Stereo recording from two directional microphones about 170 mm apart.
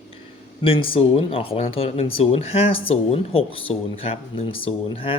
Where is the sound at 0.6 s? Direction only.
30° left (ahead or behind).